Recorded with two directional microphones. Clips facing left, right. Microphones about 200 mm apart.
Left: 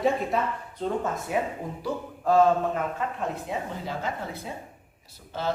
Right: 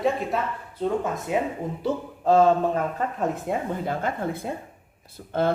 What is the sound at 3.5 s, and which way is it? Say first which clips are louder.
Speech: right 5 dB; 50° right (ahead or behind).